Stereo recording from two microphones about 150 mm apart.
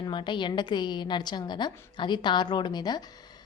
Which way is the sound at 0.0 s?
30° left (ahead or behind).